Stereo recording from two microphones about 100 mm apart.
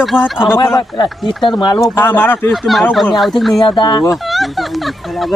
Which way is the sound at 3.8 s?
45° left (ahead or behind).